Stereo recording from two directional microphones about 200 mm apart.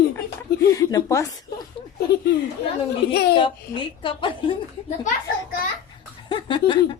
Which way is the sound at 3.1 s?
55° left (ahead or behind).